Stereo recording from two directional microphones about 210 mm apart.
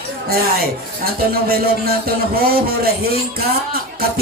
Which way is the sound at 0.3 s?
45° right (ahead or behind).